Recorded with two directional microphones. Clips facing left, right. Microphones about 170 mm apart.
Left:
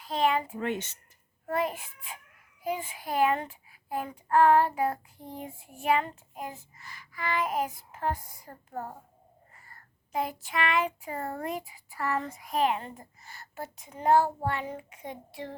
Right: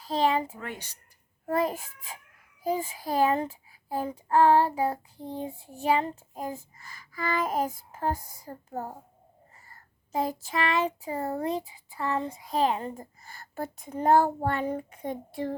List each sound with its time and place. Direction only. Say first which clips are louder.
0.0 s a child's voice: right 2 dB; 35° right (ahead or behind)
0.6 s speech: left 7 dB; 20° left (ahead or behind)
1.5 s a child's voice: right 3 dB; 40° right (ahead or behind)
9.6 s child singing: even; 40° right (ahead or behind)
11.3 s speech: right 6 dB; 30° right (ahead or behind)
12.5 s a child's voice: right 1 dB; 30° right (ahead or behind)
13.9 s child singing: right 2 dB; 45° right (ahead or behind)